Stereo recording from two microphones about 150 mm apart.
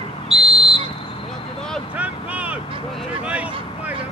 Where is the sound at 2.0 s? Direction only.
10° right (ahead or behind).